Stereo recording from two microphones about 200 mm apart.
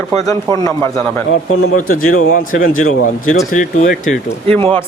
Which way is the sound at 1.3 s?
90° left.